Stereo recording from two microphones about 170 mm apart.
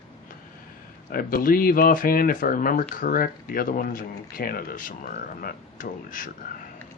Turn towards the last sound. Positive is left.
turn(degrees=50)  # may be behind; listen again after turning